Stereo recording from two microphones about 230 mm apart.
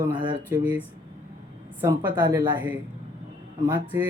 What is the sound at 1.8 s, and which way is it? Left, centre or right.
Speech, centre.